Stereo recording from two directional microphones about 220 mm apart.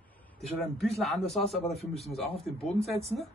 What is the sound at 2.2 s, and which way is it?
Speech, 25° left (ahead or behind).